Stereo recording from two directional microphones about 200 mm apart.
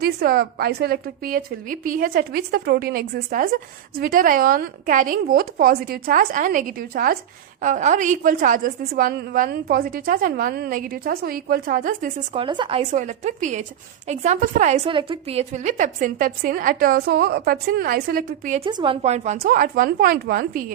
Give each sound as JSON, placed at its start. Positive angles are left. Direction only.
{"t": 0.0, "sound": "a woman's voice", "side_deg": -50}
{"t": 12.3, "sound": "a woman's voice", "side_deg": -25}
{"t": 18.6, "sound": "a woman's voice", "side_deg": -25}